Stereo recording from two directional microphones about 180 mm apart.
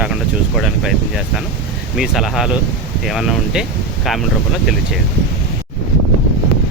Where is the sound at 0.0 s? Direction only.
5° right (ahead or behind).